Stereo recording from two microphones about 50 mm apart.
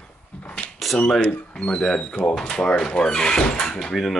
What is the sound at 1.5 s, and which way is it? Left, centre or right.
Speech, centre.